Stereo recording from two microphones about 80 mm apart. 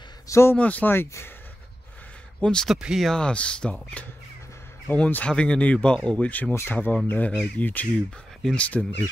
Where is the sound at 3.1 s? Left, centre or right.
Centre.